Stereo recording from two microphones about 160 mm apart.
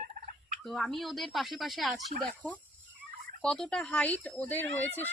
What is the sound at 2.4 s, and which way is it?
Speech, 10° left (ahead or behind).